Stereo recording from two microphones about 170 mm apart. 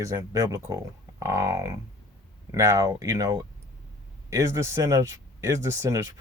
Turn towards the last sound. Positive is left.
turn(degrees=-20)  # may be behind; listen again after turning